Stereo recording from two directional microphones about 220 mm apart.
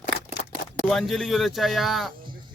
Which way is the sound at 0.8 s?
Centre (ahead or behind).